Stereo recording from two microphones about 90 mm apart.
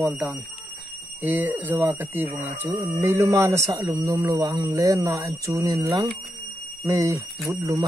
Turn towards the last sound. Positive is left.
turn(degrees=-30)  # may be behind; listen again after turning